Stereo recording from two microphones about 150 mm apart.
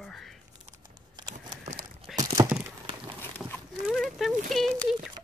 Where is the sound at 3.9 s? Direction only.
Centre (ahead or behind).